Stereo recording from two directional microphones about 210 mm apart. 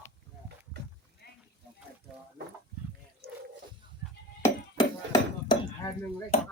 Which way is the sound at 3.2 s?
50° right (ahead or behind).